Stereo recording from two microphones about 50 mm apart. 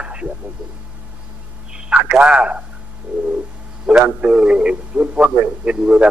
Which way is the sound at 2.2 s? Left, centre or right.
Right.